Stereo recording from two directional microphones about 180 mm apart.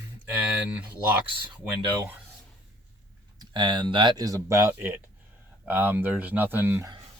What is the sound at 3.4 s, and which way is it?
Speech, 25° right (ahead or behind).